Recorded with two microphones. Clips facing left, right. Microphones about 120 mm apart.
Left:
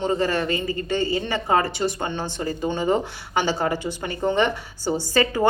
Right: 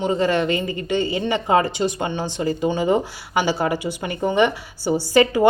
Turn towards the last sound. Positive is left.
turn(degrees=-15)  # may be behind; listen again after turning